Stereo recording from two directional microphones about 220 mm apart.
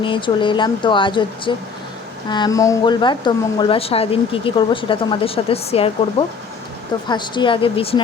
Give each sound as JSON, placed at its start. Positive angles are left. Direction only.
{"t": 0.0, "sound": "speech", "side_deg": 20}